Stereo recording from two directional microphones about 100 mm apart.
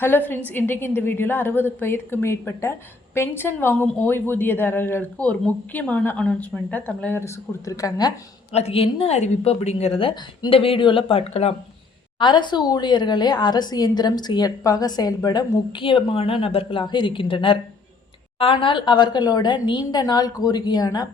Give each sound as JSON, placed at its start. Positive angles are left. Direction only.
{"t": 0.0, "sound": "a woman's voice", "side_deg": 20}
{"t": 7.2, "sound": "a woman's voice", "side_deg": 30}
{"t": 8.5, "sound": "a woman's voice", "side_deg": 80}
{"t": 12.2, "sound": "a woman's voice", "side_deg": 50}
{"t": 15.8, "sound": "speech", "side_deg": 60}
{"t": 16.8, "sound": "a woman's voice", "side_deg": 50}